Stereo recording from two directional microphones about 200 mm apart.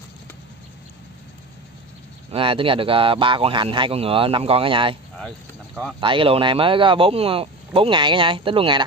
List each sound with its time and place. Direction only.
2.3 s speech: 25° right (ahead or behind)
5.9 s speech: 25° right (ahead or behind)